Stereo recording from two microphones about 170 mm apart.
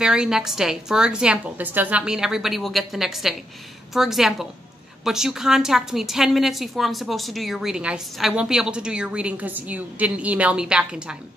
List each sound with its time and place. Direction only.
0.0 s a woman's voice: 5° right (ahead or behind)